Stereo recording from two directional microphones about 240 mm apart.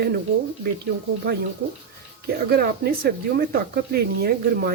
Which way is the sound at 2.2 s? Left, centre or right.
Right.